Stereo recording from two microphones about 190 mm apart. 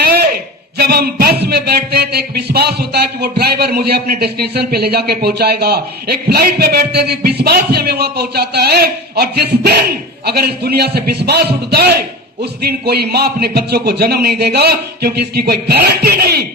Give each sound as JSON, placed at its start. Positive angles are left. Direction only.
{"t": 0.8, "sound": "a man's voice", "side_deg": -55}